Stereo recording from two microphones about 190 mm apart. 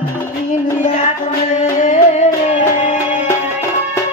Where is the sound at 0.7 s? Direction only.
40° left (ahead or behind).